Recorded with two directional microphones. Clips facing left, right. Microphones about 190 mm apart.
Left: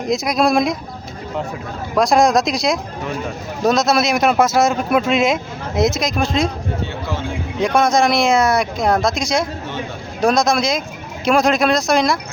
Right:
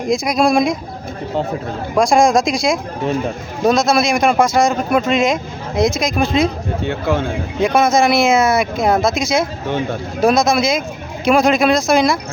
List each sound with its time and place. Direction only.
0.0 s speech: centre (ahead or behind)
2.0 s speech: centre (ahead or behind)
6.8 s speech: 60° right (ahead or behind)
7.6 s speech: 5° right (ahead or behind)